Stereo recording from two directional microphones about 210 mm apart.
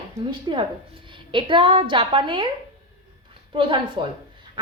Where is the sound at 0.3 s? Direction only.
25° right (ahead or behind).